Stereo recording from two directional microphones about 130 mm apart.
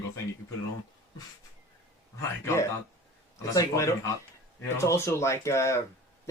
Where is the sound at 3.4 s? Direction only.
25° left (ahead or behind).